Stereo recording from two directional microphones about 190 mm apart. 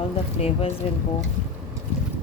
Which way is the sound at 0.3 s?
30° left (ahead or behind).